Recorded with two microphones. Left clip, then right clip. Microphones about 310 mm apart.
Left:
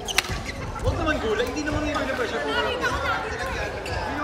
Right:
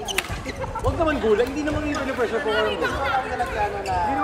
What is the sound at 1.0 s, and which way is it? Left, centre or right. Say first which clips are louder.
Speech: right 4 dB; centre.